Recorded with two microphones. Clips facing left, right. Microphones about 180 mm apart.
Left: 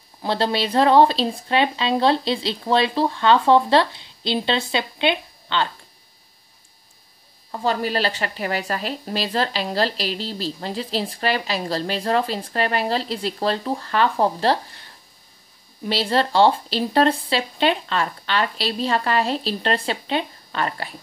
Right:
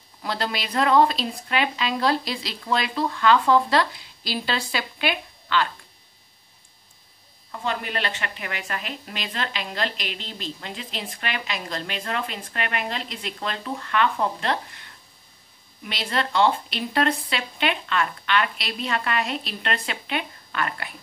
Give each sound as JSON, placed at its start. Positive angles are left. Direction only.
{"t": 0.2, "sound": "speech", "side_deg": 30}
{"t": 7.5, "sound": "speech", "side_deg": 35}